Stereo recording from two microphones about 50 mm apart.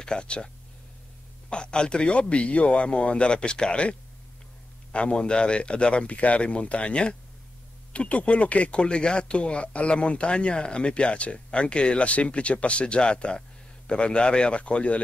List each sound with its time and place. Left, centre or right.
0.0 s speech: centre
1.5 s speech: centre
4.9 s speech: centre